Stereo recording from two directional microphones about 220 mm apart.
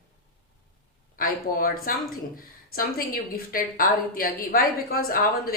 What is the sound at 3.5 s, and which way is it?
A woman's voice, 40° left (ahead or behind).